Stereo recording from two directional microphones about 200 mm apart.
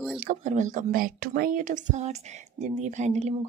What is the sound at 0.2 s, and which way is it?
Speech, 40° right (ahead or behind).